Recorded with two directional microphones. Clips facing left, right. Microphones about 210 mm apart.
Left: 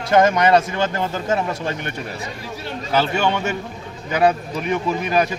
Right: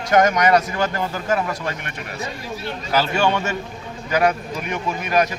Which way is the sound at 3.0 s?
20° left (ahead or behind).